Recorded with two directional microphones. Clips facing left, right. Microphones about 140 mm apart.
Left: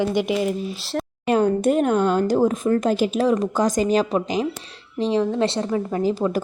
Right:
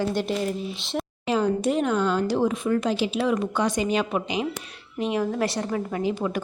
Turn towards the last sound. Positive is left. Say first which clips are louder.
# left 5 dB
turn(degrees=35)  # may be behind; listen again after turning